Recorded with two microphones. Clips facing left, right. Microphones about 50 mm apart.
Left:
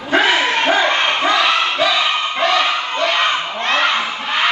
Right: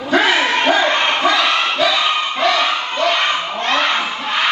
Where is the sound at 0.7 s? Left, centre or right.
Left.